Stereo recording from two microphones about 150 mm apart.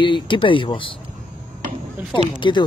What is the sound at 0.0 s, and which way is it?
Speech, 35° left (ahead or behind).